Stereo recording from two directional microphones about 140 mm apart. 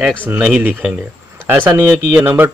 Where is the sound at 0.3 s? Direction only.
10° right (ahead or behind).